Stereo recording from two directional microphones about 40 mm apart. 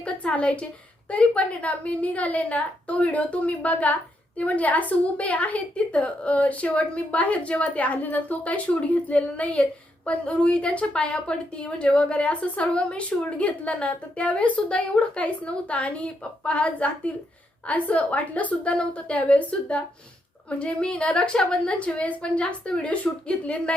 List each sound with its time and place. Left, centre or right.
0.0 s a woman's voice: left
18.7 s a woman's voice: left
21.8 s a woman's voice: left